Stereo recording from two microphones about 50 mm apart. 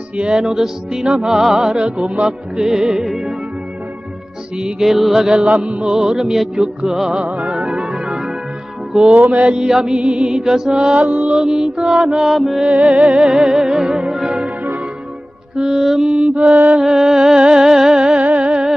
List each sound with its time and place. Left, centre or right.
0.4 s music: centre
2.0 s music: centre
4.6 s music: centre
4.8 s mantra: centre
5.4 s music: right
5.9 s music: centre
9.3 s music: right
9.6 s music: centre
12.3 s mantra: centre
13.1 s music: centre
15.5 s music: centre